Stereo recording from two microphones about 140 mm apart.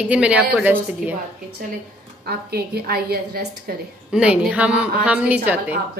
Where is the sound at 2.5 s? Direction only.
90° right.